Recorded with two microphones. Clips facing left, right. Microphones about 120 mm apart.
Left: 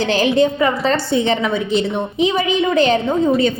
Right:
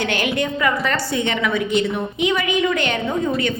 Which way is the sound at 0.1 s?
30° left (ahead or behind).